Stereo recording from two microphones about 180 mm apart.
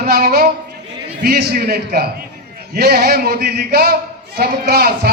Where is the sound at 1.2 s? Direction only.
60° right (ahead or behind).